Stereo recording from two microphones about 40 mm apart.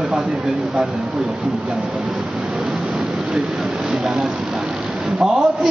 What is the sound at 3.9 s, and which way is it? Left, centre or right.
Vehicle, centre.